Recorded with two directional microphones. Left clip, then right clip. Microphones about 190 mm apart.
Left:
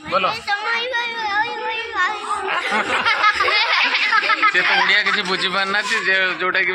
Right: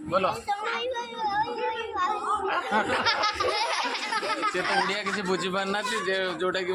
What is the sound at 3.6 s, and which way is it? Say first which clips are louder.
Snicker: left 11 dB; 15° right (ahead or behind).